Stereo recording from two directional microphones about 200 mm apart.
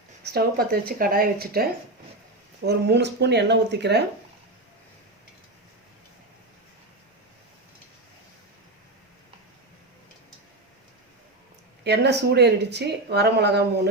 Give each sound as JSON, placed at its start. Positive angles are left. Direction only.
{"t": 0.3, "sound": "speech", "side_deg": -50}
{"t": 2.6, "sound": "speech", "side_deg": -55}
{"t": 11.8, "sound": "speech", "side_deg": -55}